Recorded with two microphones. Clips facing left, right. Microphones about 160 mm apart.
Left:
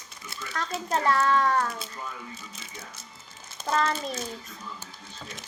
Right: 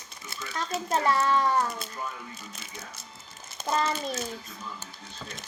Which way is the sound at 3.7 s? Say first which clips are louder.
Left 1 dB; 15° right (ahead or behind).